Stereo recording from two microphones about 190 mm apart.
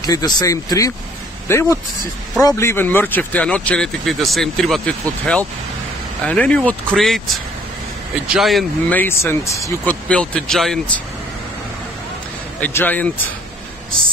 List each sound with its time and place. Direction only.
0.0 s speech: 20° left (ahead or behind); by 7.2 s 5° left (ahead or behind)
8.3 s speech: centre (ahead or behind)
9.0 s speech: 15° left (ahead or behind)
12.5 s speech: 10° left (ahead or behind)